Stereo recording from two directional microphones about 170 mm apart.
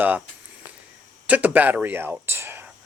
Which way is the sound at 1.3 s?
10° right (ahead or behind).